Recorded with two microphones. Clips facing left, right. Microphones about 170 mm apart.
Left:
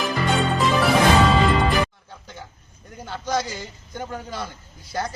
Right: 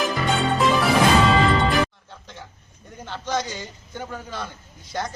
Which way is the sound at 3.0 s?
10° left (ahead or behind).